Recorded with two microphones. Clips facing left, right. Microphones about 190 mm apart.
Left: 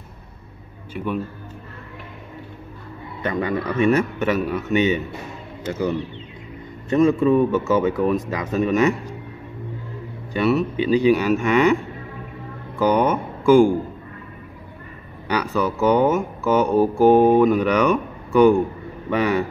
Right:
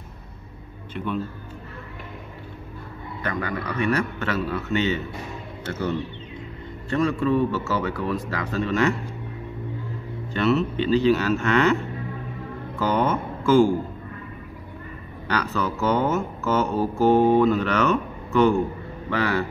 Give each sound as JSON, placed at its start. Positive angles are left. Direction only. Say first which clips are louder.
{"t": 0.9, "sound": "speech", "louder": "left 2 dB", "side_deg": 10}
{"t": 3.2, "sound": "speech", "louder": "left 5 dB", "side_deg": 25}
{"t": 10.3, "sound": "speech", "louder": "left 2 dB", "side_deg": 10}
{"t": 15.2, "sound": "speech", "louder": "left 4 dB", "side_deg": 15}